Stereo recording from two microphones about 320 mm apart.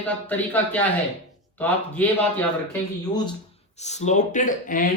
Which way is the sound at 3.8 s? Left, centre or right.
Left.